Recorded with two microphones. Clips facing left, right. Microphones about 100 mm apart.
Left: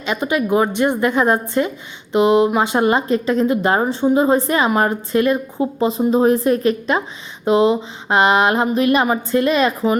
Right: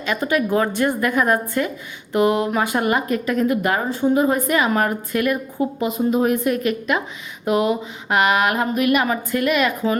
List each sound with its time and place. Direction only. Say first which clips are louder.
0.0 s a woman's voice: left 1 dB; 20° left (ahead or behind)